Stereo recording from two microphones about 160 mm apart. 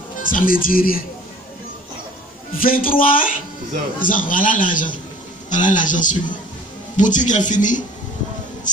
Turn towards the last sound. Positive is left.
turn(degrees=50)  # may be behind; listen again after turning